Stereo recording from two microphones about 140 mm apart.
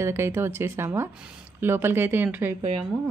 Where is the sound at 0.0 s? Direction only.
15° right (ahead or behind).